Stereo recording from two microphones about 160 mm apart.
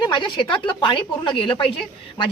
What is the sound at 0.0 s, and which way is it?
Speech, 30° left (ahead or behind).